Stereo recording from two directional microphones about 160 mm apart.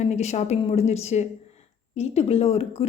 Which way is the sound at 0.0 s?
45° left (ahead or behind).